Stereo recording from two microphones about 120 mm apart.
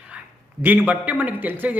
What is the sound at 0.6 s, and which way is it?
Speech, 15° right (ahead or behind).